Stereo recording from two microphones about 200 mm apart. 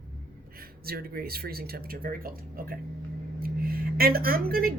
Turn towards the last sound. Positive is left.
turn(degrees=-50)  # may be behind; listen again after turning